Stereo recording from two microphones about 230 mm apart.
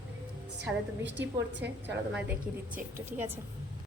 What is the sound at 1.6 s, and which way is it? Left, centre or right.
Speech, right.